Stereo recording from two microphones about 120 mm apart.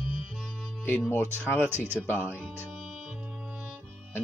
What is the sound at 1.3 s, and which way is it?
Speech, 15° left (ahead or behind).